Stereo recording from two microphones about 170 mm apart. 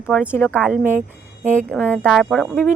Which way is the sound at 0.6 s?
5° right (ahead or behind).